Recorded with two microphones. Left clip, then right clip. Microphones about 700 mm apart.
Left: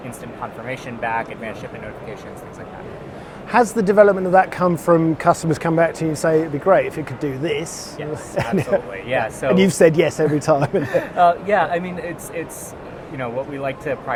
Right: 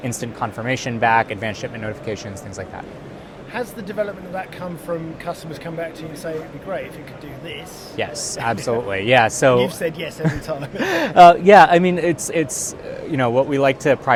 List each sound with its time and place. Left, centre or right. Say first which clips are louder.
0.7 s speech: right 7 dB; right
3.5 s a man's voice: left 12 dB; left
8.4 s speech: right 1 dB; right
9.6 s a man's voice: left 6 dB; left
10.8 s speech: right 9 dB; right